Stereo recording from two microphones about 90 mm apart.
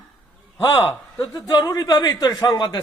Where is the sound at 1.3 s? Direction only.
45° left (ahead or behind).